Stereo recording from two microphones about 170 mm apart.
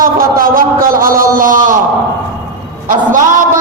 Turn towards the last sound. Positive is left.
turn(degrees=-50)  # may be behind; listen again after turning